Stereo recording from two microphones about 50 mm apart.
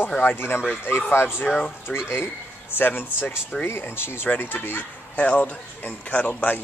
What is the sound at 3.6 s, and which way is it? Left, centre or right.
Speech, left.